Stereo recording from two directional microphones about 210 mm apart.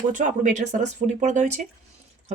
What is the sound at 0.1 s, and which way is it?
Speech, 40° right (ahead or behind).